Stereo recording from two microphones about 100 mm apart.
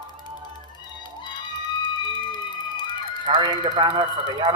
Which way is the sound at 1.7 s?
50° left (ahead or behind).